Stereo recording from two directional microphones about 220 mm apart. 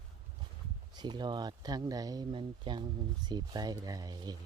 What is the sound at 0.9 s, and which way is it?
Speech, 20° right (ahead or behind).